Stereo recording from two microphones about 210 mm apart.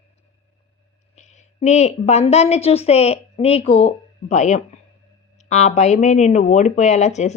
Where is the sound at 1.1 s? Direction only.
35° left (ahead or behind).